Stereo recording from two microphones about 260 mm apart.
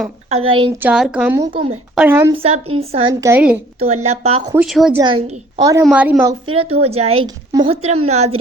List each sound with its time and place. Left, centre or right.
0.3 s a woman's voice: right
0.8 s a woman's voice: centre
2.3 s a woman's voice: right
3.1 s a woman's voice: centre
3.8 s a woman's voice: right
4.5 s a woman's voice: centre
4.9 s a woman's voice: centre
5.8 s a woman's voice: centre; by 8.4 s right